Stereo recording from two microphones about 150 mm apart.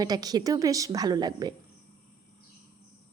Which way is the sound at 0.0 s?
25° right (ahead or behind).